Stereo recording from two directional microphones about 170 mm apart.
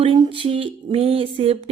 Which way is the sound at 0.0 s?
30° right (ahead or behind).